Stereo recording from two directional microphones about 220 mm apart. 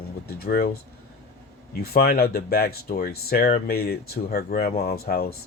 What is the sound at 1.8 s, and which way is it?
Speech, 45° left (ahead or behind).